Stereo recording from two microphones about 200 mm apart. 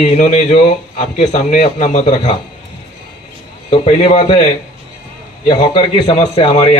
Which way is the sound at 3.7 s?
30° left (ahead or behind).